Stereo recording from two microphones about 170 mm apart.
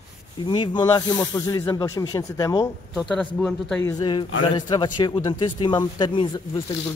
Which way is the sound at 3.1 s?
5° left (ahead or behind).